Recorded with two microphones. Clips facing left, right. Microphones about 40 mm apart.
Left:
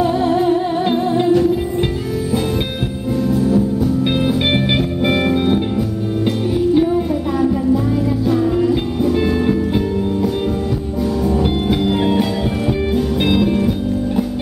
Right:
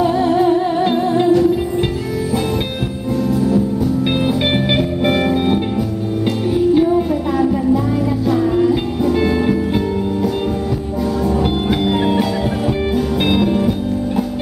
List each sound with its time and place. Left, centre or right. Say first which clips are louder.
0.0 s music: right 1 dB; centre
1.3 s music: right 1 dB; centre
3.3 s music: left 1 dB; centre
11.2 s music: even; centre